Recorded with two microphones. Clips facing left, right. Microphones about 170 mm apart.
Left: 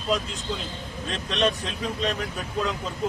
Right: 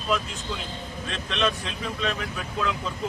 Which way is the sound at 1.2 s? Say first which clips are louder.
Left 2 dB; 40° left (ahead or behind).